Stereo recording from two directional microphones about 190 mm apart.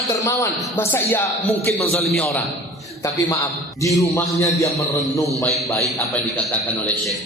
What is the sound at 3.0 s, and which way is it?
A man's voice, 15° left (ahead or behind).